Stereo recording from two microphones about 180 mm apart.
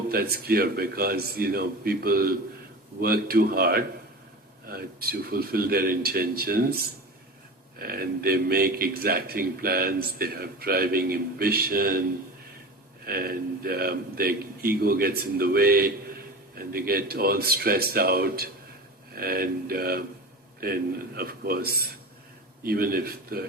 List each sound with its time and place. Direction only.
0.1 s a man's voice: 55° right (ahead or behind)
13.1 s a man's voice: 55° right (ahead or behind)